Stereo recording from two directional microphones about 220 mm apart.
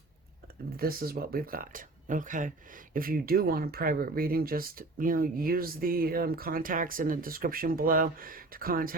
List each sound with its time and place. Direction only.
0.8 s speech: 45° right (ahead or behind)